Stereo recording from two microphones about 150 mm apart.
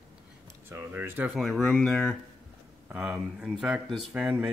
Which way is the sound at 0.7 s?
15° right (ahead or behind).